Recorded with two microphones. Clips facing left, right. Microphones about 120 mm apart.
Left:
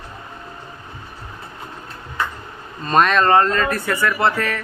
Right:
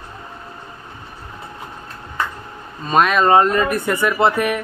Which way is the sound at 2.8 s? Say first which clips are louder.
Right 1 dB; 5° right (ahead or behind).